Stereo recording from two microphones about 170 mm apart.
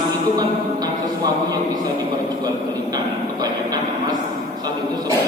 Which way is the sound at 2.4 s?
25° right (ahead or behind).